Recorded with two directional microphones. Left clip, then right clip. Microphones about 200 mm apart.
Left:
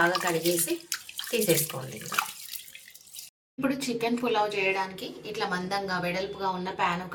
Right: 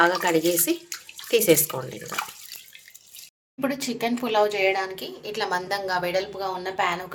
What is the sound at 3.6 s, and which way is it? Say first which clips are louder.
A woman's voice: right 2 dB; 55° right (ahead or behind).